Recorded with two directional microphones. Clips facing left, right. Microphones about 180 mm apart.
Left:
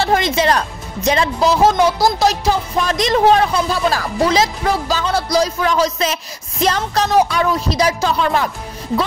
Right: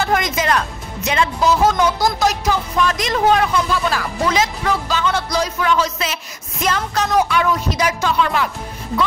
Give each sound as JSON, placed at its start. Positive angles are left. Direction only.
{"t": 0.0, "sound": "a woman's voice", "side_deg": 30}